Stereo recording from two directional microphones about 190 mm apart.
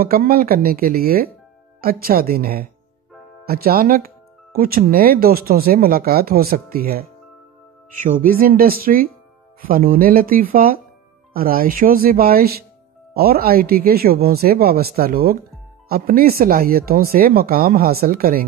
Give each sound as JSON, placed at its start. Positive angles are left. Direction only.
{"t": 0.0, "sound": "speech", "side_deg": -50}